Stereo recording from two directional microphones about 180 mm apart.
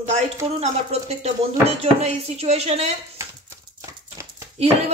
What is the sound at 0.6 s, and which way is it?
A woman's voice, 35° right (ahead or behind).